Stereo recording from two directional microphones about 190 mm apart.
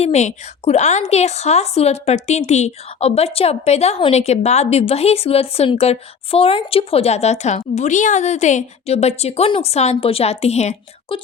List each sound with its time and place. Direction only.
0.0 s a woman's voice: 35° left (ahead or behind)